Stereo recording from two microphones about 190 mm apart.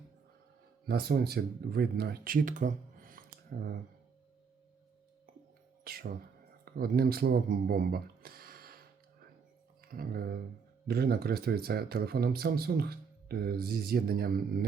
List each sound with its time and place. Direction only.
0.9 s speech: 55° right (ahead or behind)
5.8 s music: 55° right (ahead or behind)
6.7 s speech: 50° right (ahead or behind)
9.9 s speech: 50° right (ahead or behind)